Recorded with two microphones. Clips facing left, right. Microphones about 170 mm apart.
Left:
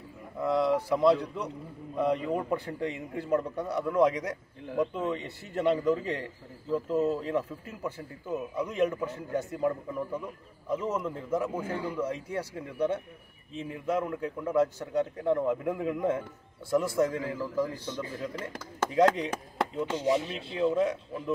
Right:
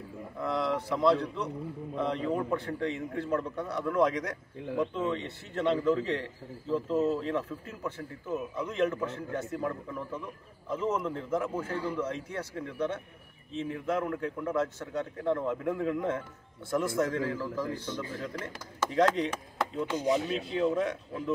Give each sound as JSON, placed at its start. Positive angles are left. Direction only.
{"t": 0.4, "sound": "a man's voice", "side_deg": 5}
{"t": 18.9, "sound": "a man's voice", "side_deg": 10}